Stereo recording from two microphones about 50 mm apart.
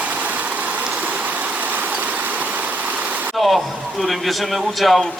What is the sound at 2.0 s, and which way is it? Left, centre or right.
Vehicle, right.